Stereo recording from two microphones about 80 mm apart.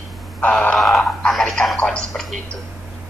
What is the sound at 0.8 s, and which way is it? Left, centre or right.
Speech, centre.